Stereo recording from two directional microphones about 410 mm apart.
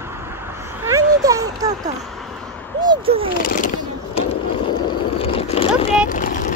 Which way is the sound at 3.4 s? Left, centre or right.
Centre.